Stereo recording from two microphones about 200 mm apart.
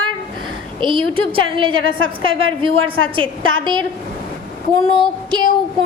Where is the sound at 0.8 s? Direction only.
25° right (ahead or behind).